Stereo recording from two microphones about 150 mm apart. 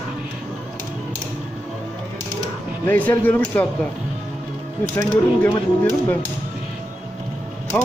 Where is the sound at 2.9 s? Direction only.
10° left (ahead or behind).